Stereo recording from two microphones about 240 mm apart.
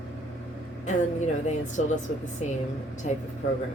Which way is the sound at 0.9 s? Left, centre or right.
Left.